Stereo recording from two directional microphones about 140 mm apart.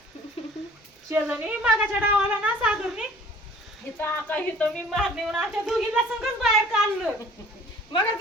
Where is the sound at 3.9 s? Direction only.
15° left (ahead or behind).